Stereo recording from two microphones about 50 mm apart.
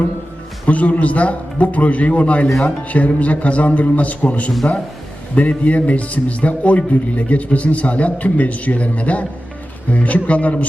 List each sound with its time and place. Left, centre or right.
0.6 s a man's voice: left